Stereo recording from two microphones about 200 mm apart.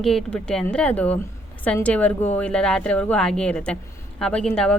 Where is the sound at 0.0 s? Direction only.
Centre (ahead or behind).